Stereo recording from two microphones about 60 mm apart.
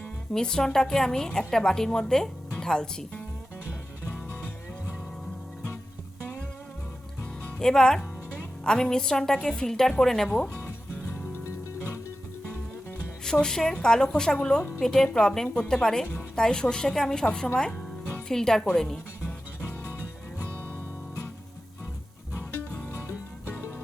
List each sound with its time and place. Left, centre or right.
0.3 s a woman's voice: centre
7.6 s a woman's voice: centre
11.1 s music: left
13.2 s a woman's voice: centre